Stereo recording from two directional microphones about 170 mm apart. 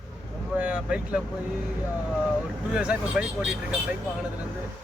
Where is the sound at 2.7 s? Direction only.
5° right (ahead or behind).